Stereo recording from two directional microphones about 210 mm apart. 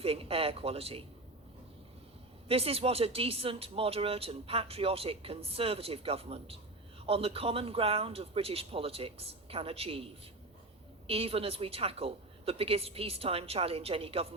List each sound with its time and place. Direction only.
0.0 s speech: 25° right (ahead or behind)
2.5 s speech: 30° right (ahead or behind)